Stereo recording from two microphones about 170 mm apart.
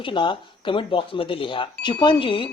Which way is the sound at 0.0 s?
30° left (ahead or behind).